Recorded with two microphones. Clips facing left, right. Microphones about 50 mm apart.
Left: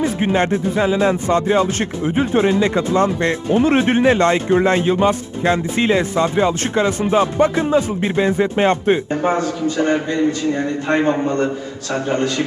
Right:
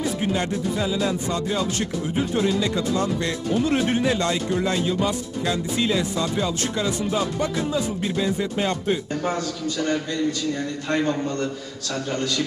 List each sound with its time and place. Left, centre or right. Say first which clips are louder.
0.0 s speech: left 7 dB; left